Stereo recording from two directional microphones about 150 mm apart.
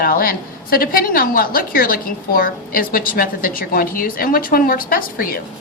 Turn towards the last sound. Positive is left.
turn(degrees=75)  # may be behind; listen again after turning